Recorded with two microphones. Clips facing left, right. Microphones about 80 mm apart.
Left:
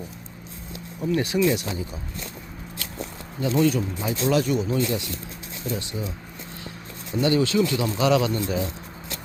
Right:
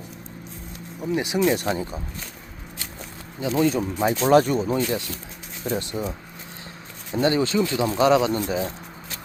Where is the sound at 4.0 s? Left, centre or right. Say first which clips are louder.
Right 6 dB; right.